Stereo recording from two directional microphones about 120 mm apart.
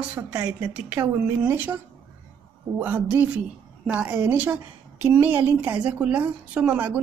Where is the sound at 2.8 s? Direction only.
15° right (ahead or behind).